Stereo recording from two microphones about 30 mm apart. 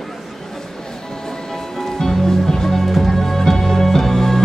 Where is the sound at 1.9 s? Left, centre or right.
Centre.